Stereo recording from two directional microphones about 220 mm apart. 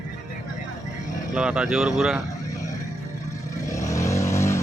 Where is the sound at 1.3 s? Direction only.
5° right (ahead or behind).